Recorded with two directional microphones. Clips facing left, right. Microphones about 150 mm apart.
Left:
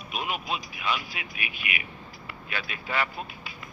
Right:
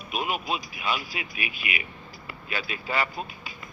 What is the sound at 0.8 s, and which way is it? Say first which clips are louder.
Speech: left 1 dB; 40° right (ahead or behind).